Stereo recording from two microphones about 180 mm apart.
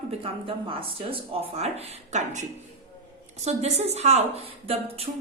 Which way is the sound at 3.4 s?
40° right (ahead or behind).